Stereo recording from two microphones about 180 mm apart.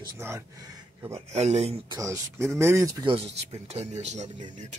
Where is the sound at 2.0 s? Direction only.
15° right (ahead or behind).